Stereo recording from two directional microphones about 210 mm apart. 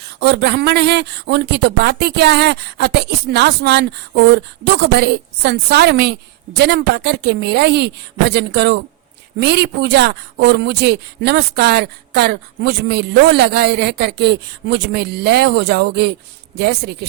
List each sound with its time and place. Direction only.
0.2 s speech: 55° right (ahead or behind)